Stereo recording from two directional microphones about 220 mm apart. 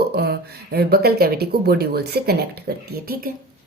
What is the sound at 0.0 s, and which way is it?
Speech, 45° right (ahead or behind).